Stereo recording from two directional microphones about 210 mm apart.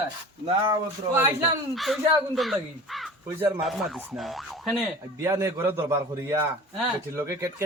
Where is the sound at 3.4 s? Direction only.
25° right (ahead or behind).